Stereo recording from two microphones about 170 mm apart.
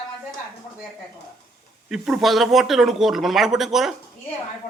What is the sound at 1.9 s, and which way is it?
Speech, centre (ahead or behind).